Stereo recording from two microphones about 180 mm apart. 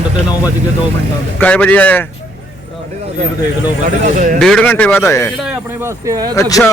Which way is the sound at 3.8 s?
45° right (ahead or behind).